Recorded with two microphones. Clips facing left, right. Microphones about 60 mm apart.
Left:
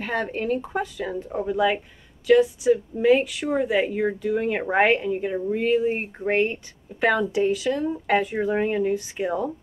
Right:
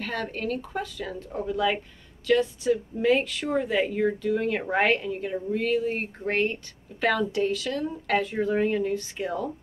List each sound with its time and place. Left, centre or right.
0.0 s a woman's voice: centre